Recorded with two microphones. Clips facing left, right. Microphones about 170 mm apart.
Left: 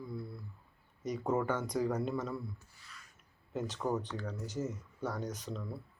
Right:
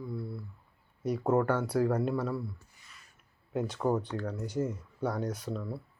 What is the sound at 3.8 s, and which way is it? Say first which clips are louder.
Speech: right 5 dB; 30° right (ahead or behind).